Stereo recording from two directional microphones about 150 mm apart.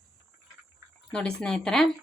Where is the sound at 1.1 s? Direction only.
5° left (ahead or behind).